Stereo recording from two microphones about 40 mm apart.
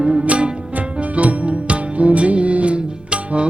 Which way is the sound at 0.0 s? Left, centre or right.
Right.